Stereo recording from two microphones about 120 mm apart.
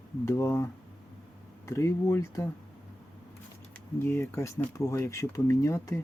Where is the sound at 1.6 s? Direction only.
25° left (ahead or behind).